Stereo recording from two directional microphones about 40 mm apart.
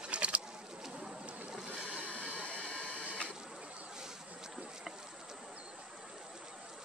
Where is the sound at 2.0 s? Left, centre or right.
Right.